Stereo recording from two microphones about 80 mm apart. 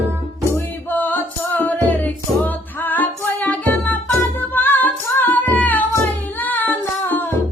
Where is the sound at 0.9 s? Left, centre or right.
Left.